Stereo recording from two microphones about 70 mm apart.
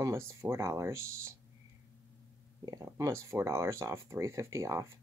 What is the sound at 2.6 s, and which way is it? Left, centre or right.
Speech, right.